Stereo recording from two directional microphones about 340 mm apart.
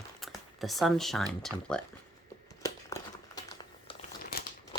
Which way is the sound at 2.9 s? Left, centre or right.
Centre.